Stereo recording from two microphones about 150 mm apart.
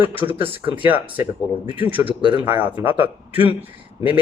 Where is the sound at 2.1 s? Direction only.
30° right (ahead or behind).